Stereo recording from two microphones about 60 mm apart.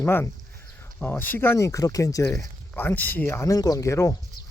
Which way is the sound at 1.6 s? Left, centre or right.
Left.